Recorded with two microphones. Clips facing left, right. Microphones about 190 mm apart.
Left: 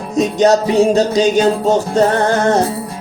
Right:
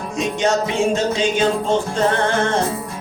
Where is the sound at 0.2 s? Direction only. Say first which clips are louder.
Left 7 dB; 35° left (ahead or behind).